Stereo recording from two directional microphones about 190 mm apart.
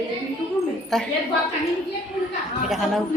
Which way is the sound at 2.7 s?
Centre (ahead or behind).